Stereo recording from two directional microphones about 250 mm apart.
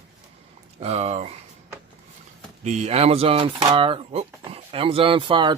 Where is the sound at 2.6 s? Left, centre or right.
Right.